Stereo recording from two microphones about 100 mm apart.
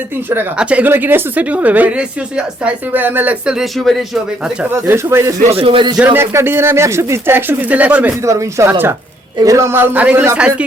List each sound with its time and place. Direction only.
0.5 s speech: 10° right (ahead or behind)
3.4 s speech: 5° right (ahead or behind)
4.7 s speech: 25° right (ahead or behind)
5.5 s speech: 70° right (ahead or behind)
6.1 s speech: 25° right (ahead or behind)
8.2 s speech: 30° right (ahead or behind); by 10.7 s 10° right (ahead or behind)